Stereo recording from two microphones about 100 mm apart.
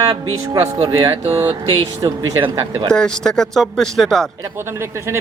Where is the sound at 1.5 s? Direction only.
50° right (ahead or behind).